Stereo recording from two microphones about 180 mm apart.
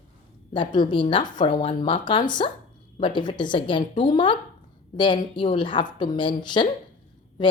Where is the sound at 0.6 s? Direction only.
25° left (ahead or behind).